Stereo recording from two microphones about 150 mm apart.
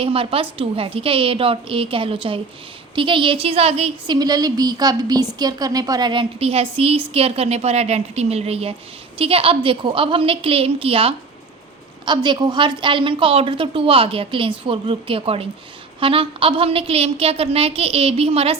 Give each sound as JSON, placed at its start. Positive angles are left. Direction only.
{"t": 0.0, "sound": "a woman's voice", "side_deg": -40}
{"t": 4.1, "sound": "a woman's voice", "side_deg": -25}